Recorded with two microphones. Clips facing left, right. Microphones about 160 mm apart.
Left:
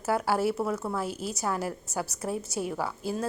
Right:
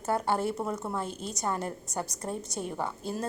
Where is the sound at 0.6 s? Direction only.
20° right (ahead or behind).